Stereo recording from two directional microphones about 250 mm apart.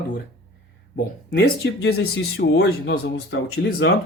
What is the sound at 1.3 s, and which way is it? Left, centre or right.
Speech, left.